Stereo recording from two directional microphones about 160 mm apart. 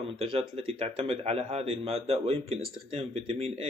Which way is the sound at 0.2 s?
35° right (ahead or behind).